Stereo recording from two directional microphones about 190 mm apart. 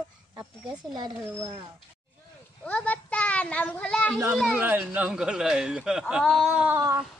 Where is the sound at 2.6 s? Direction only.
10° left (ahead or behind); by 7.0 s 15° right (ahead or behind).